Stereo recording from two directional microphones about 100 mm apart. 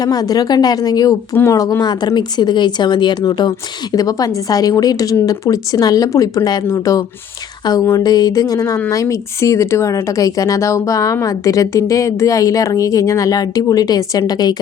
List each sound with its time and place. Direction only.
0.0 s speech: 40° left (ahead or behind)
7.6 s speech: 40° left (ahead or behind)